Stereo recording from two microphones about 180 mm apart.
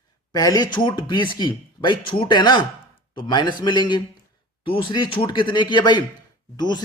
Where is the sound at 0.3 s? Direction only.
20° left (ahead or behind).